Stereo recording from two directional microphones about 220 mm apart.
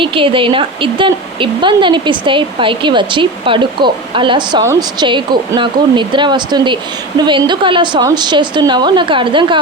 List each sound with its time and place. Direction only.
0.0 s a woman's voice: 25° right (ahead or behind)